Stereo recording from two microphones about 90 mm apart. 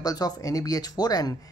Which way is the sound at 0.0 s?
45° left (ahead or behind).